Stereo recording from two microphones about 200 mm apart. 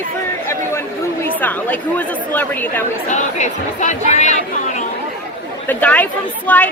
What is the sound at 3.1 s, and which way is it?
Speech, 35° left (ahead or behind).